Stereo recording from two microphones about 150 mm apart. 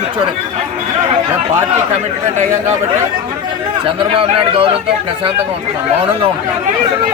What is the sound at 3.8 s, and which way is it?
Speech, 35° right (ahead or behind).